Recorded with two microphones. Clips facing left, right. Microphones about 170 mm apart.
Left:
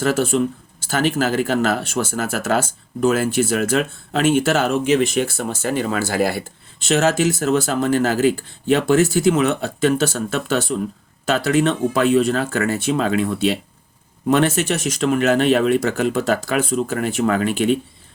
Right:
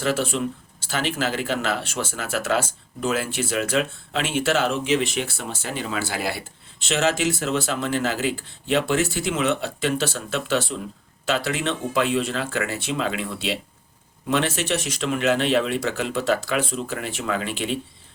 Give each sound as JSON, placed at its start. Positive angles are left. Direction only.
{"t": 0.0, "sound": "speech", "side_deg": 45}